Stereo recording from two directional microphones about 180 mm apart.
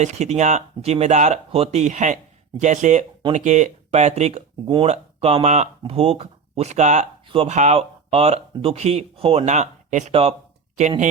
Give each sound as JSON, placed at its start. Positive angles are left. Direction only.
{"t": 0.0, "sound": "speech", "side_deg": -40}